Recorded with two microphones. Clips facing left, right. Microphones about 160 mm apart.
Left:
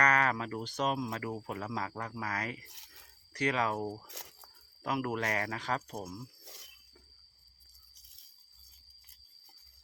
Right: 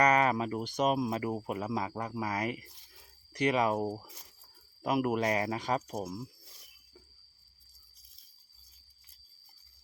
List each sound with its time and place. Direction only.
0.0 s speech: 15° right (ahead or behind)